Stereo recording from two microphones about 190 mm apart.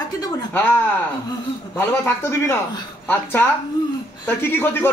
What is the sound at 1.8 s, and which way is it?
Speech, 10° left (ahead or behind).